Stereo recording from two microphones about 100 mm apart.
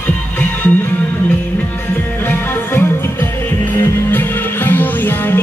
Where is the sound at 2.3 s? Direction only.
20° left (ahead or behind).